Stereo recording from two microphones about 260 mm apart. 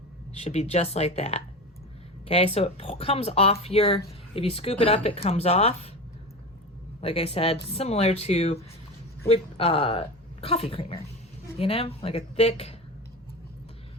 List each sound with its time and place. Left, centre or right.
0.4 s speech: left
7.0 s speech: left